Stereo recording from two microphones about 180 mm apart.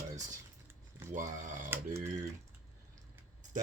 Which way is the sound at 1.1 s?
45° right (ahead or behind).